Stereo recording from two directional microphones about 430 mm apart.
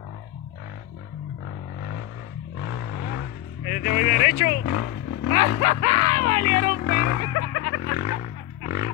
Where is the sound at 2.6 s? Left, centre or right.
Left.